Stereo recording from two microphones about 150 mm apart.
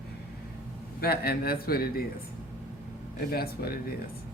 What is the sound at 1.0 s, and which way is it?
A man's voice, 90° left.